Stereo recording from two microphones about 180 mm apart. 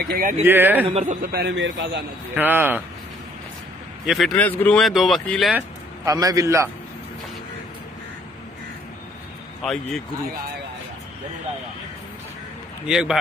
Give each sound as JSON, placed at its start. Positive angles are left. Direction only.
{"t": 0.0, "sound": "speech", "side_deg": -55}
{"t": 0.4, "sound": "speech", "side_deg": -10}
{"t": 0.8, "sound": "a man's voice", "side_deg": -35}
{"t": 1.2, "sound": "a man's voice", "side_deg": -60}
{"t": 2.3, "sound": "speech", "side_deg": -10}
{"t": 4.0, "sound": "speech", "side_deg": 0}
{"t": 6.0, "sound": "a man's voice", "side_deg": -20}
{"t": 9.6, "sound": "speech", "side_deg": 0}
{"t": 12.8, "sound": "speech", "side_deg": -5}